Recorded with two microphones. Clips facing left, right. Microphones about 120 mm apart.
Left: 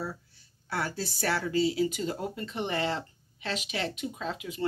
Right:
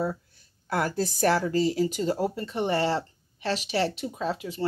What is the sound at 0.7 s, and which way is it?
Speech, 50° right (ahead or behind).